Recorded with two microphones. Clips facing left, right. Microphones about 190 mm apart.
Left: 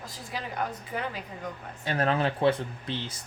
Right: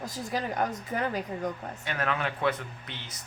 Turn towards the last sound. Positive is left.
turn(degrees=30)  # may be behind; listen again after turning